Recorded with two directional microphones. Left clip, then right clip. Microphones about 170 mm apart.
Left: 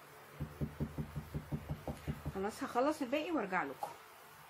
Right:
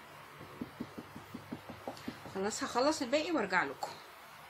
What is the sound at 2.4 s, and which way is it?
A woman's voice, 20° left (ahead or behind).